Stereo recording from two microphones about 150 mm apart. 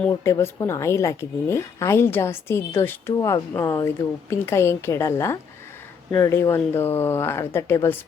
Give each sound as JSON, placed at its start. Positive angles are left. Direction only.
{"t": 0.1, "sound": "a woman's voice", "side_deg": 20}